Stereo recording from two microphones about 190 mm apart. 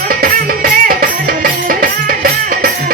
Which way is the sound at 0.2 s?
50° right (ahead or behind).